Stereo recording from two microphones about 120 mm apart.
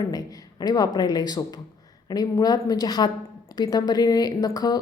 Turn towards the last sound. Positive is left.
turn(degrees=35)  # may be behind; listen again after turning